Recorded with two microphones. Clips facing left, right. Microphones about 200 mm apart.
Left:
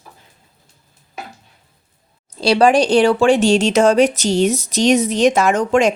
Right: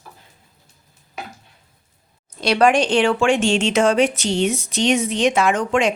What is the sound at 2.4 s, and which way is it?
Speech, 30° left (ahead or behind).